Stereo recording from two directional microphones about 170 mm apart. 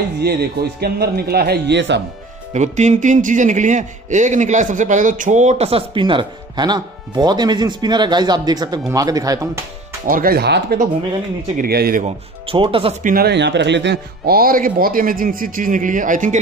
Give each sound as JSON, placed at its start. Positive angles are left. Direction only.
{"t": 0.2, "sound": "speech", "side_deg": -70}
{"t": 2.5, "sound": "speech", "side_deg": -45}
{"t": 10.0, "sound": "speech", "side_deg": -55}
{"t": 12.4, "sound": "speech", "side_deg": -30}
{"t": 13.0, "sound": "speech", "side_deg": -60}